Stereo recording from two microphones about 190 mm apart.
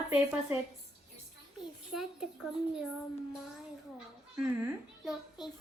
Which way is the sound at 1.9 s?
Centre (ahead or behind).